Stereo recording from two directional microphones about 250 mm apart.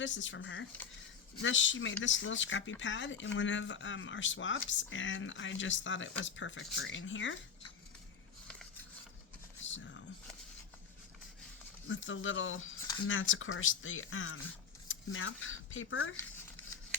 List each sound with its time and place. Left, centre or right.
0.0 s speech: left
9.6 s a sound: left
11.9 s speech: left